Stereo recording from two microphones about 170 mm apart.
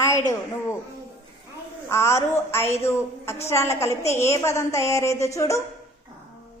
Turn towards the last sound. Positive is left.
turn(degrees=15)  # may be behind; listen again after turning